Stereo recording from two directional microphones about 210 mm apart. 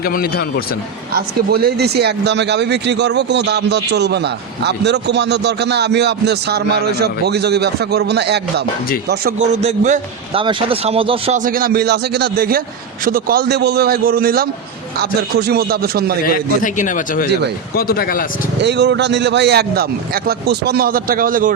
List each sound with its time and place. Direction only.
0.0 s speech: 45° left (ahead or behind)
1.1 s speech: 50° right (ahead or behind)
9.4 s a man's voice: 35° right (ahead or behind)
11.3 s speech: 40° right (ahead or behind)
16.2 s a man's voice: 40° left (ahead or behind)
18.6 s speech: 55° right (ahead or behind)